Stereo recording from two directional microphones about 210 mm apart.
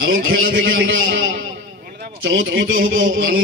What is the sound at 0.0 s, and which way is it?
A man's voice, 65° right (ahead or behind).